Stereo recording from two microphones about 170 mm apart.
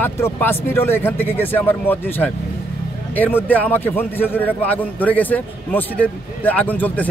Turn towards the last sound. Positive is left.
turn(degrees=10)  # may be behind; listen again after turning